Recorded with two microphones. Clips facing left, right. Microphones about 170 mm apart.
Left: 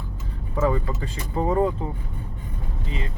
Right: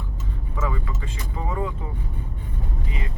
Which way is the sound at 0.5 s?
35° left (ahead or behind).